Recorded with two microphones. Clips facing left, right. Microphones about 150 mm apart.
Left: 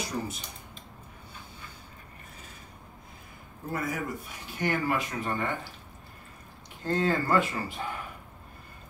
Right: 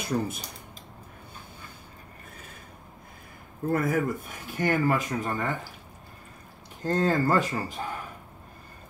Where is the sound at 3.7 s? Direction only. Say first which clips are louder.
Right 6 dB; 50° right (ahead or behind).